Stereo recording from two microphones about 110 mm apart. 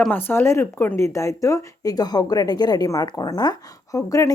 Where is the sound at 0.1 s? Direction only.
20° left (ahead or behind).